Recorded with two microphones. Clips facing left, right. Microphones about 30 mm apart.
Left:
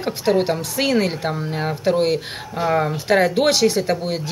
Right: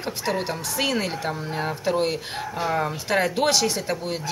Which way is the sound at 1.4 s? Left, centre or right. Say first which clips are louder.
Left 3 dB; centre.